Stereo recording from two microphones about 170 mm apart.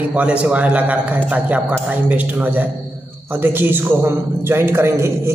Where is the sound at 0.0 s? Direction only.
10° right (ahead or behind).